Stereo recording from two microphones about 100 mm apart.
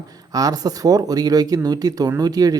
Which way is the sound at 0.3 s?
40° right (ahead or behind).